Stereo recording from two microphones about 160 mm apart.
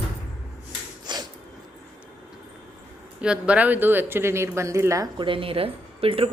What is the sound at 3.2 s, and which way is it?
Speech, 5° right (ahead or behind).